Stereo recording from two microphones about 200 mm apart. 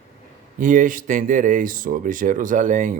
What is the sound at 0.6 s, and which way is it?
Speech, 40° right (ahead or behind).